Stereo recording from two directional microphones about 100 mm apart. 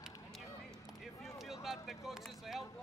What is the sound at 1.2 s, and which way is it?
Speech, 5° right (ahead or behind).